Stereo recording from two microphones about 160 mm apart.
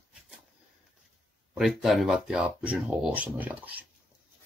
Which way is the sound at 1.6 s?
Centre (ahead or behind).